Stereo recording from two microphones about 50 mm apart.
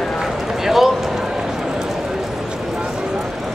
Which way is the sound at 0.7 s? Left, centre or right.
Centre.